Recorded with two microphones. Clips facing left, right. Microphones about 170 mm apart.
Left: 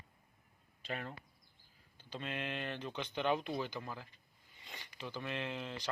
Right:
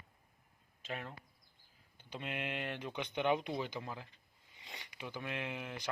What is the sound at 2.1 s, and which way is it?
Speech, 15° right (ahead or behind).